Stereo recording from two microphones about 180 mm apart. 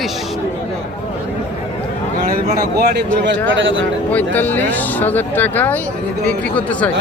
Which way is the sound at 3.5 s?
90° right.